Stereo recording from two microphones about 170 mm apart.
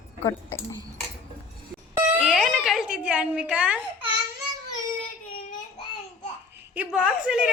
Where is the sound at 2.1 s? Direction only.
Centre (ahead or behind).